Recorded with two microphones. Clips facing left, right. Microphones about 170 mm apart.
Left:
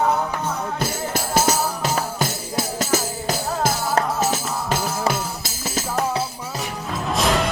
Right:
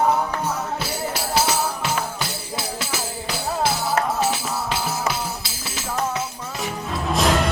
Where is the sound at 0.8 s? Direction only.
45° left (ahead or behind).